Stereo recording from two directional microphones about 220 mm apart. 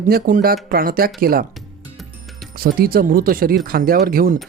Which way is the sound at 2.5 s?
40° right (ahead or behind).